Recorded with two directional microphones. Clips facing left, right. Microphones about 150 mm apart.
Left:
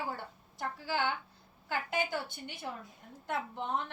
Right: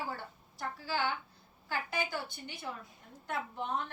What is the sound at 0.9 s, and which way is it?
A woman's voice, 20° left (ahead or behind).